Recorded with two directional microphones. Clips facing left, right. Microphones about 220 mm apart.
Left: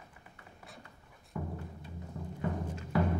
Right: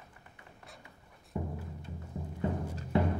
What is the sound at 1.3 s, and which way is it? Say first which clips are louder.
Music: right 2 dB; 25° right (ahead or behind).